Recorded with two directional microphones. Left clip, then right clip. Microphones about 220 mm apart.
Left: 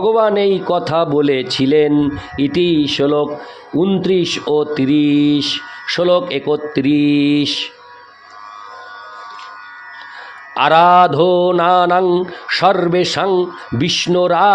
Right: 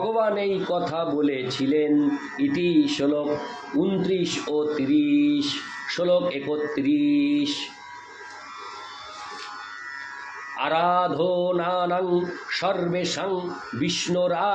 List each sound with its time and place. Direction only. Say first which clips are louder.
0.1 s mantra: left 11 dB; 50° left (ahead or behind)
10.5 s mantra: left 13 dB; 50° left (ahead or behind)